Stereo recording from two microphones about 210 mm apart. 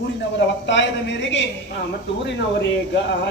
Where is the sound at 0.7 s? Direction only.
60° left (ahead or behind).